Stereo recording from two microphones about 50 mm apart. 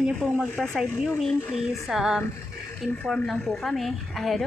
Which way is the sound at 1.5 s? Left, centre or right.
Centre.